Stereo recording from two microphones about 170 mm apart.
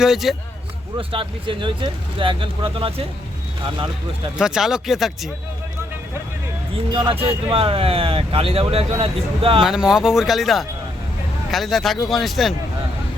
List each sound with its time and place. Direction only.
0.0 s speech: centre (ahead or behind)
0.9 s speech: 30° right (ahead or behind)
4.4 s speech: 5° right (ahead or behind)
6.9 s speech: 30° right (ahead or behind)
9.6 s speech: 5° right (ahead or behind)